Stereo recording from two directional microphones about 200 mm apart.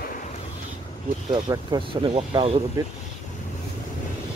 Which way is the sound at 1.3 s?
25° right (ahead or behind).